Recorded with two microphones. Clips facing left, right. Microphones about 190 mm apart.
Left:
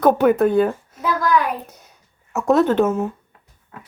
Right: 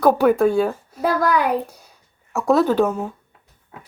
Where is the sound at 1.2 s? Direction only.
70° right (ahead or behind).